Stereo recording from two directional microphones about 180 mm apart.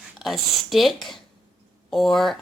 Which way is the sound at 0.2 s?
Centre (ahead or behind).